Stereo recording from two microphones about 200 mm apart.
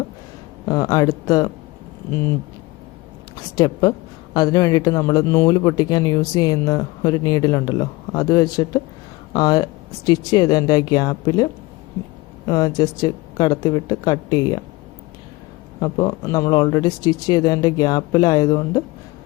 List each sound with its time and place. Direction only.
0.7 s speech: 20° left (ahead or behind)
3.5 s speech: 20° left (ahead or behind)
12.5 s speech: 15° left (ahead or behind)
15.8 s speech: 20° left (ahead or behind)